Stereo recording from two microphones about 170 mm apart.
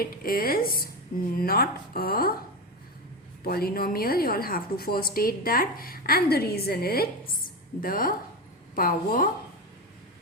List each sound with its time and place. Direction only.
0.0 s a woman's voice: 60° left (ahead or behind)
3.4 s a woman's voice: 60° left (ahead or behind)